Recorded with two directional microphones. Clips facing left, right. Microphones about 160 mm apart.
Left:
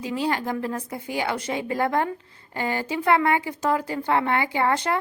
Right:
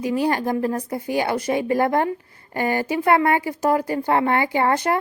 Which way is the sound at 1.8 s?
20° right (ahead or behind).